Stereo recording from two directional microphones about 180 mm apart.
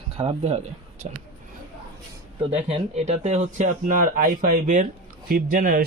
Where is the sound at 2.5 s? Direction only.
35° right (ahead or behind).